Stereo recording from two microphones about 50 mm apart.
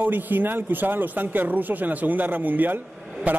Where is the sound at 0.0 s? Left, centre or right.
Right.